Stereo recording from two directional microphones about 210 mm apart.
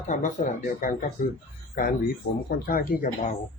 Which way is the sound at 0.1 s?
35° left (ahead or behind).